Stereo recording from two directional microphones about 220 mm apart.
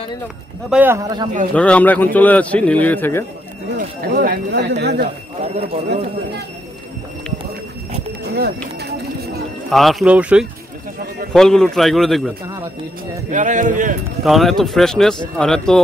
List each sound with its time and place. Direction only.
0.7 s speech: 10° right (ahead or behind)
1.5 s a man's voice: 5° left (ahead or behind)
3.7 s speech: 40° right (ahead or behind)
9.7 s speech: centre (ahead or behind)
13.3 s a man's voice: 35° right (ahead or behind)
14.2 s speech: centre (ahead or behind)